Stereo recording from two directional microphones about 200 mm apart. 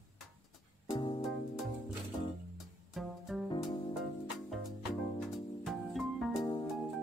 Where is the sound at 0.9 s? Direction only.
25° left (ahead or behind).